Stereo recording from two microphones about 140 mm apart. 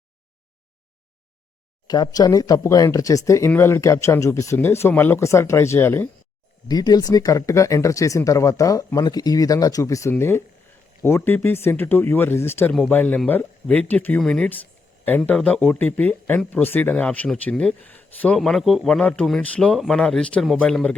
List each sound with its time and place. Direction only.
1.9 s speech: 25° left (ahead or behind)
6.7 s speech: 30° left (ahead or behind); by 20.9 s 5° left (ahead or behind)